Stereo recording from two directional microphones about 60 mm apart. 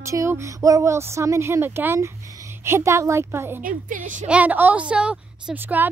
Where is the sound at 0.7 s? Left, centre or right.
Right.